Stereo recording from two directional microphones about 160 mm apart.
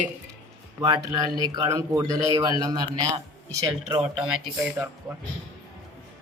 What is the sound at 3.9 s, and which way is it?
Speech, 35° right (ahead or behind).